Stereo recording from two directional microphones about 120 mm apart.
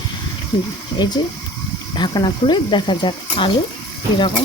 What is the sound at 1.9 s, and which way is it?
Speech, 35° left (ahead or behind).